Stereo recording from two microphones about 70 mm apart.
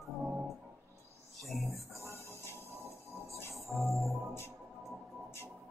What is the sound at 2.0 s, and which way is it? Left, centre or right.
Music, right.